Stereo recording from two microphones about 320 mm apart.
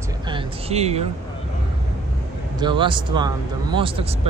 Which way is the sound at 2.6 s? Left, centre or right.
Centre.